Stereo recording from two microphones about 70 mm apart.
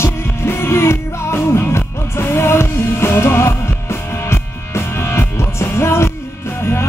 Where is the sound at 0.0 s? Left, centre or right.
Left.